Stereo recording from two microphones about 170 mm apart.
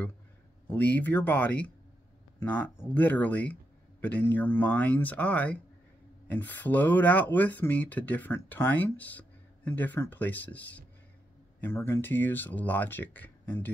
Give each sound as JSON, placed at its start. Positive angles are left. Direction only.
{"t": 0.7, "sound": "speech", "side_deg": 10}